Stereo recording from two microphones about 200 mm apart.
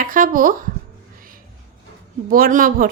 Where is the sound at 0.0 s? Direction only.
45° right (ahead or behind).